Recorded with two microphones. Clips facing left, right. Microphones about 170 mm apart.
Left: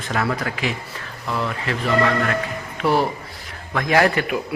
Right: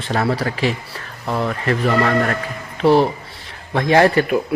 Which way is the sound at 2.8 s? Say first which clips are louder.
Right 6 dB; 25° right (ahead or behind).